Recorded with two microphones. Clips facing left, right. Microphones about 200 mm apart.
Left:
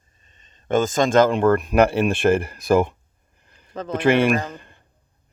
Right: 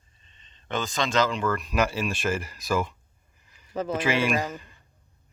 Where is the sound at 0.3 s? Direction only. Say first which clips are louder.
Left 11 dB; 45° left (ahead or behind).